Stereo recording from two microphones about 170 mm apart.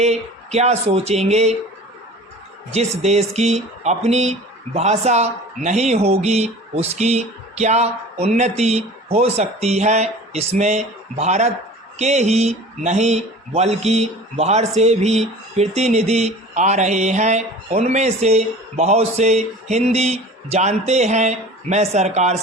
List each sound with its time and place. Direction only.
0.0 s speech: 40° right (ahead or behind)
2.7 s speech: 40° right (ahead or behind)